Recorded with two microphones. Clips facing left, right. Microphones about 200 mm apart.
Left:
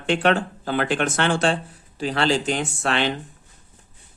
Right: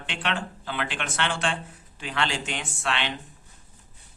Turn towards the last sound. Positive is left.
turn(degrees=40)  # may be behind; listen again after turning